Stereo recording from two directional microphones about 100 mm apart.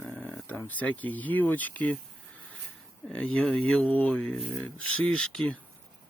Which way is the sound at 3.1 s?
10° left (ahead or behind).